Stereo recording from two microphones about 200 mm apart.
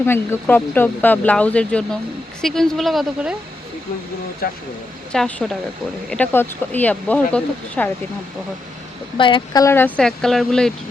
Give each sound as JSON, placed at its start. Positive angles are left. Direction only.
{"t": 0.0, "sound": "a woman's voice", "side_deg": 10}
{"t": 4.4, "sound": "speech", "side_deg": 45}
{"t": 5.1, "sound": "a woman's voice", "side_deg": 0}
{"t": 9.1, "sound": "speech", "side_deg": 25}